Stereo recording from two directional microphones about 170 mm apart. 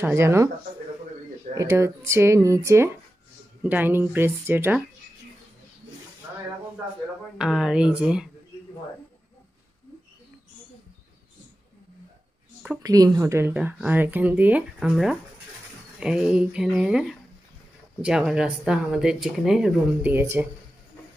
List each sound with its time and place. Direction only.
0.0 s a woman's voice: 15° right (ahead or behind)
1.5 s a woman's voice: 15° right (ahead or behind)
7.3 s speech: 5° right (ahead or behind)
12.8 s a woman's voice: 20° right (ahead or behind)